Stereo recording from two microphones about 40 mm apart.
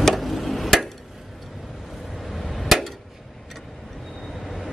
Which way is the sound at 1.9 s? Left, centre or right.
Centre.